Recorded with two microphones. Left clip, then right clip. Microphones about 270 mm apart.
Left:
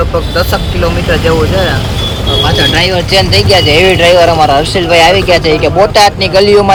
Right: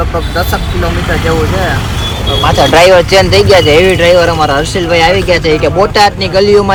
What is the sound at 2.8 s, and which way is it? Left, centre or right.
Speech, centre.